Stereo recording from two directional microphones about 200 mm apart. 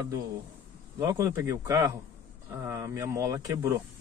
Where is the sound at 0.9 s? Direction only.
15° right (ahead or behind).